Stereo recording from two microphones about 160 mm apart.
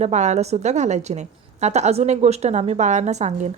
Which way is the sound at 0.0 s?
45° right (ahead or behind).